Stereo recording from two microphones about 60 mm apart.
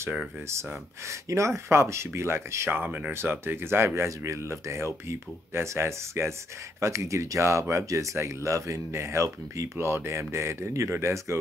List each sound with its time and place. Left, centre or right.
1.0 s speech: right
2.8 s speech: right
3.1 s speech: right